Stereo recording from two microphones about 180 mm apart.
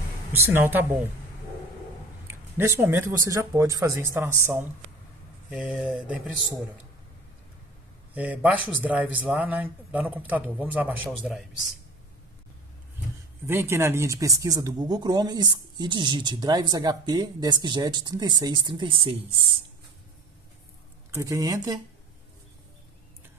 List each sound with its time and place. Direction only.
0.5 s a man's voice: 10° right (ahead or behind)
2.2 s a man's voice: 15° right (ahead or behind)
5.5 s mantra: 5° right (ahead or behind)
8.1 s a man's voice: 10° right (ahead or behind)
11.1 s mantra: centre (ahead or behind)
13.5 s speech: 15° right (ahead or behind); by 19.2 s 30° right (ahead or behind)
21.1 s speech: 15° right (ahead or behind)